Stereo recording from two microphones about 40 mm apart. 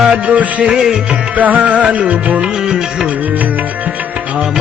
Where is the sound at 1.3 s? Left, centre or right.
Right.